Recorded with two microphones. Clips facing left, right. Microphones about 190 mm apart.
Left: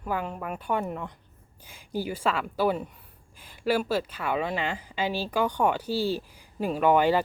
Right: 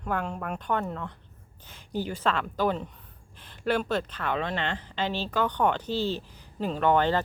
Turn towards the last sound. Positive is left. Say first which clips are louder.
# left 2 dB
turn(degrees=10)  # may be behind; listen again after turning